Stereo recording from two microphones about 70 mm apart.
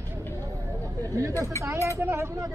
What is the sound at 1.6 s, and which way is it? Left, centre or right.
Speech, right.